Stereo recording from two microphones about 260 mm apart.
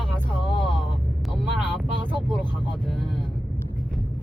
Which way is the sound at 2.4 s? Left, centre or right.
Centre.